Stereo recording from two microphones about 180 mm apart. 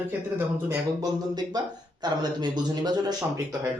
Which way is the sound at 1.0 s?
20° right (ahead or behind).